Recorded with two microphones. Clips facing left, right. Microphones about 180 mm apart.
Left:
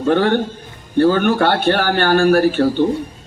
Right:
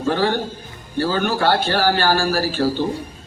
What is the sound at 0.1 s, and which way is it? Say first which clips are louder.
A man's voice: left 5 dB; 60° left (ahead or behind).